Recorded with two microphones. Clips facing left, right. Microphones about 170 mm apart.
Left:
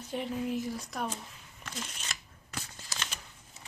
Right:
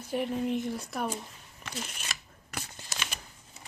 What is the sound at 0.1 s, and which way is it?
Speech, centre (ahead or behind).